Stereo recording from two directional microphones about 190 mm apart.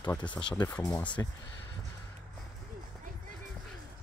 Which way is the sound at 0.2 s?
25° left (ahead or behind).